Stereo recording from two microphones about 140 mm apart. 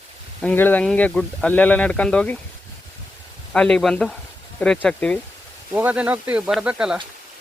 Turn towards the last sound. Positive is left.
turn(degrees=-5)  # may be behind; listen again after turning